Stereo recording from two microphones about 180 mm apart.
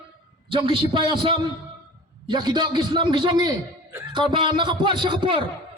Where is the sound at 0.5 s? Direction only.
30° right (ahead or behind).